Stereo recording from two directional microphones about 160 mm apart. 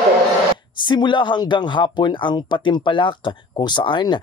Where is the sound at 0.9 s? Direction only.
30° left (ahead or behind).